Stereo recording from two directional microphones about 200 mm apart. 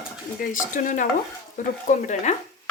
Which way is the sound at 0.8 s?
40° left (ahead or behind).